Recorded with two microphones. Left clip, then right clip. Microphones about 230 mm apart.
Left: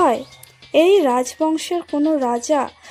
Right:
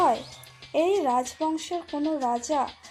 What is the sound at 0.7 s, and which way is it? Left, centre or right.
Speech, left.